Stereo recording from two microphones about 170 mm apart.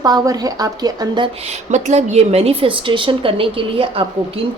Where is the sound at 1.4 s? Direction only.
40° right (ahead or behind).